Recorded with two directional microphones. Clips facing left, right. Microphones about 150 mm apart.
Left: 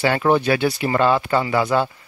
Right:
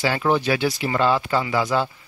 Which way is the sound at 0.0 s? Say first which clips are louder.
Left 3 dB; 55° left (ahead or behind).